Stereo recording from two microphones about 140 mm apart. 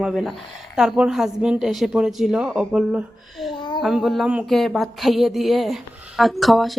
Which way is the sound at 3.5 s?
35° left (ahead or behind).